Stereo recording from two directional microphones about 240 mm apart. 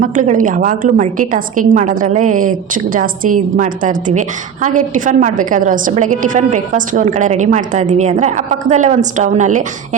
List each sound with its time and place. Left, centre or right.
0.0 s a woman's voice: right